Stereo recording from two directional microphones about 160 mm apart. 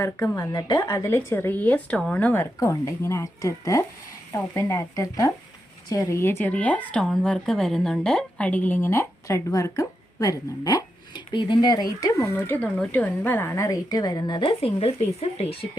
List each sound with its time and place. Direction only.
0.0 s speech: 20° left (ahead or behind); by 15.5 s 40° left (ahead or behind)